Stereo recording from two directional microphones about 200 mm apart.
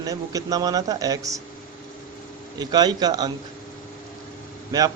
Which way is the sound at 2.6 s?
20° right (ahead or behind).